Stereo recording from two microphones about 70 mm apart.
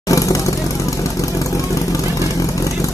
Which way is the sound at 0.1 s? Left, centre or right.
Left.